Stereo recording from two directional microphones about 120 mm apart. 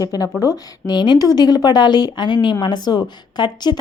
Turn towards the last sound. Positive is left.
turn(degrees=35)  # may be behind; listen again after turning